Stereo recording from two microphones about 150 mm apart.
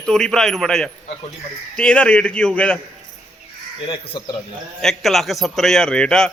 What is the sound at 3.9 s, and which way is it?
Speech, 35° left (ahead or behind).